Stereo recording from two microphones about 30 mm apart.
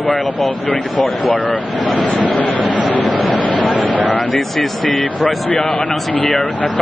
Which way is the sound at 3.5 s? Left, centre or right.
Left.